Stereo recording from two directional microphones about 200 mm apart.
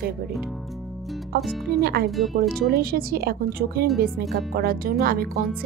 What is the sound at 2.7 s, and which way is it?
Speech, 50° right (ahead or behind).